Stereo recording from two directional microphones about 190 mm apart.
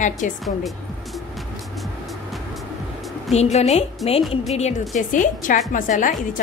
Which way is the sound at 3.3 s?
35° left (ahead or behind).